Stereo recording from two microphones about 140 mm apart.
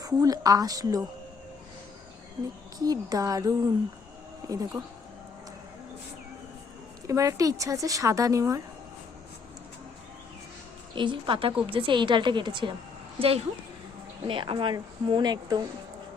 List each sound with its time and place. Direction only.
0.2 s a woman's voice: 25° right (ahead or behind)
2.7 s a woman's voice: 25° right (ahead or behind)
7.1 s a woman's voice: 20° right (ahead or behind)
10.9 s speech: 35° right (ahead or behind)